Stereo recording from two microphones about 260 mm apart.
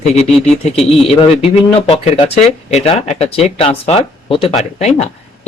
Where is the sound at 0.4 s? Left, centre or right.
Left.